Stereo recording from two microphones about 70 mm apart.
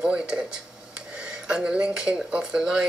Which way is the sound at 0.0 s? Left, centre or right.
Centre.